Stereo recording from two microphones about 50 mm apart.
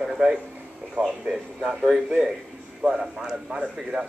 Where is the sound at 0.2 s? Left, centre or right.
Centre.